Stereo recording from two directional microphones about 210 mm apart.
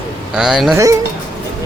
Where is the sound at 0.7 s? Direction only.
15° right (ahead or behind).